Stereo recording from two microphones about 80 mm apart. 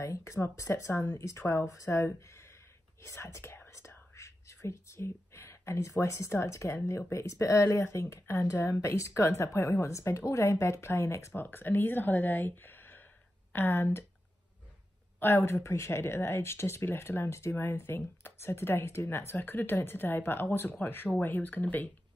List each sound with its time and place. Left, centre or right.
0.0 s a woman's voice: left
15.1 s speech: left